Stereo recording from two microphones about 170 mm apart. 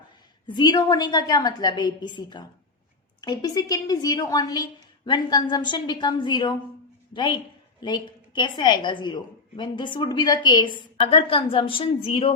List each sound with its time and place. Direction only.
0.4 s a woman's voice: 25° left (ahead or behind)